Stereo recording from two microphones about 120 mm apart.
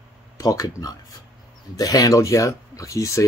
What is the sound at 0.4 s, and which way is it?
Speech, 30° left (ahead or behind).